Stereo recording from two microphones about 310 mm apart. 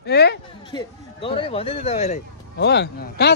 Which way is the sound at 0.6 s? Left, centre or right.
Centre.